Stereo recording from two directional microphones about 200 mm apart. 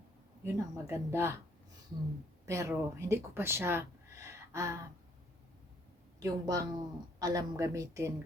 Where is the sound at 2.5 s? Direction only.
15° right (ahead or behind).